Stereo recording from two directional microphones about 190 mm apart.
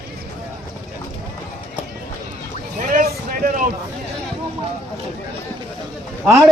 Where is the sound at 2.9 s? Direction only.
45° right (ahead or behind).